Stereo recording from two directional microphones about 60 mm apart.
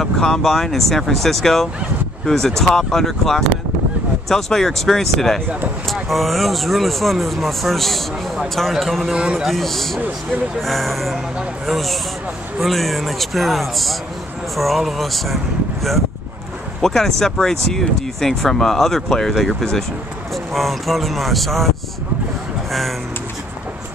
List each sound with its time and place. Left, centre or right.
0.0 s speech: centre
9.1 s a man's voice: centre
9.4 s speech: centre
16.8 s speech: centre